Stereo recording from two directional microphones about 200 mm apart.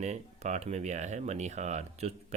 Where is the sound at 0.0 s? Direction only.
35° right (ahead or behind).